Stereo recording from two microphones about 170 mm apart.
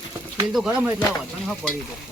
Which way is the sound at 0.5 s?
5° right (ahead or behind).